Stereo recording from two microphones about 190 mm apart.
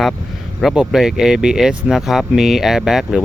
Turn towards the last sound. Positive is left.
turn(degrees=0)  # may be behind; listen again after turning